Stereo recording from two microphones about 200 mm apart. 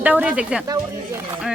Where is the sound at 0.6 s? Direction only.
20° right (ahead or behind).